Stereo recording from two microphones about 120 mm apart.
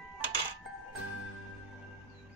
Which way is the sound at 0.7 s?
Centre (ahead or behind).